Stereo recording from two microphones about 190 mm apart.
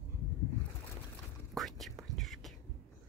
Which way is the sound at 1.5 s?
Centre (ahead or behind).